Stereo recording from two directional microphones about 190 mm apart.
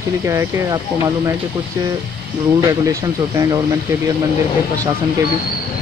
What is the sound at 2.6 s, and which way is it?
Speech, 15° right (ahead or behind).